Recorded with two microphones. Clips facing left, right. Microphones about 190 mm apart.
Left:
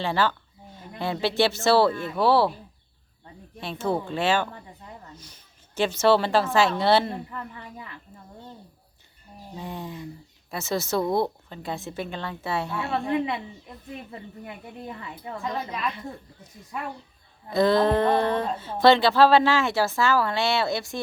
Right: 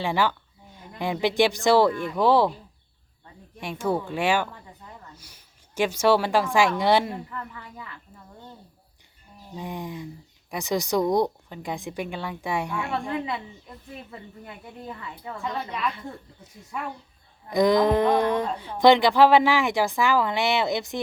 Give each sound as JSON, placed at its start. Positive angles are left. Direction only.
{"t": 0.0, "sound": "a woman's voice", "side_deg": -15}
{"t": 3.6, "sound": "a woman's voice", "side_deg": -10}
{"t": 7.3, "sound": "speech", "side_deg": 25}
{"t": 9.6, "sound": "a woman's voice", "side_deg": -15}
{"t": 13.0, "sound": "speech", "side_deg": 20}
{"t": 15.4, "sound": "a woman's voice", "side_deg": 0}
{"t": 17.5, "sound": "a woman's voice", "side_deg": -15}